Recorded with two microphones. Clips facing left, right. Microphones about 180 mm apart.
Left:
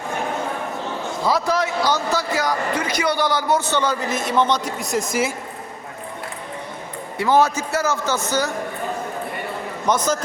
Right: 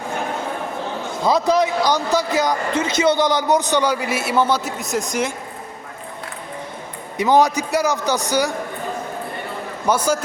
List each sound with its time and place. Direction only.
1.2 s speech: 20° right (ahead or behind); by 5.3 s 5° left (ahead or behind)
7.2 s speech: 15° right (ahead or behind)
9.8 s speech: 10° right (ahead or behind)